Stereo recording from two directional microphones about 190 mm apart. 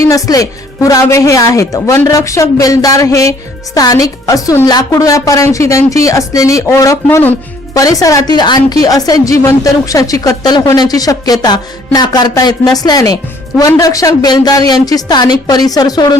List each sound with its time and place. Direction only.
0.0 s a woman's voice: 20° left (ahead or behind)